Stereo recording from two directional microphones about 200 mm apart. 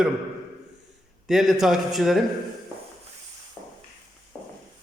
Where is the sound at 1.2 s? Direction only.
Centre (ahead or behind).